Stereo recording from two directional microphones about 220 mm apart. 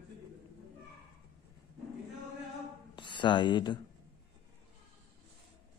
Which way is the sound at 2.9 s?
20° left (ahead or behind).